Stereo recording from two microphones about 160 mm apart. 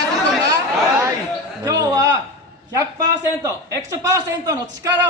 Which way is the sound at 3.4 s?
20° right (ahead or behind).